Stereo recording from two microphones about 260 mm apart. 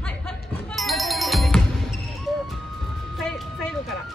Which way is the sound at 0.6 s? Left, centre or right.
Centre.